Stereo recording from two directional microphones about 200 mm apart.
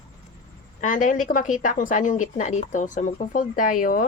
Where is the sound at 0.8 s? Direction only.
40° left (ahead or behind).